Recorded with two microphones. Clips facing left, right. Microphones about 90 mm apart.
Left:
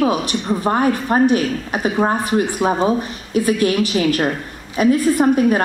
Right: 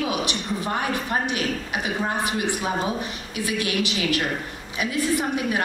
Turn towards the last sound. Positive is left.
turn(degrees=45)  # may be behind; listen again after turning